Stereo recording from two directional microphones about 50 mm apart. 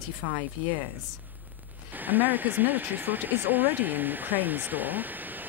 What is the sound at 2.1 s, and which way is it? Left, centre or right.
Speech, right.